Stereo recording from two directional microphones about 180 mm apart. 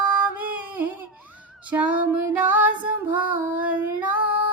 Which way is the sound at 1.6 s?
10° right (ahead or behind).